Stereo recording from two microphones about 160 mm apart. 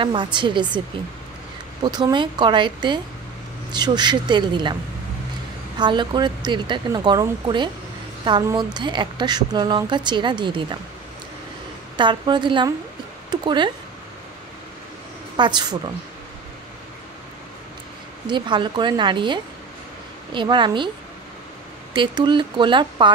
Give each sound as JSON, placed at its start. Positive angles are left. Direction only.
{"t": 0.0, "sound": "a woman's voice", "side_deg": -30}
{"t": 1.8, "sound": "speech", "side_deg": -25}
{"t": 5.8, "sound": "speech", "side_deg": -30}
{"t": 12.0, "sound": "speech", "side_deg": -30}
{"t": 15.3, "sound": "speech", "side_deg": -25}
{"t": 18.2, "sound": "speech", "side_deg": -30}
{"t": 21.9, "sound": "speech", "side_deg": -30}